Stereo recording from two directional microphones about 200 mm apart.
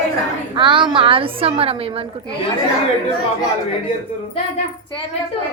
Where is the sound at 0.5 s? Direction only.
25° right (ahead or behind).